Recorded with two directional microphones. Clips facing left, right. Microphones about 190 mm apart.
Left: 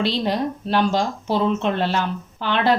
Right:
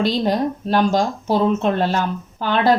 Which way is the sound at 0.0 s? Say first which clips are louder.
Right 3 dB; 45° right (ahead or behind).